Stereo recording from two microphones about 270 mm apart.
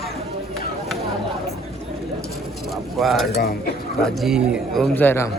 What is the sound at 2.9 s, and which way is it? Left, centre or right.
Speech, centre.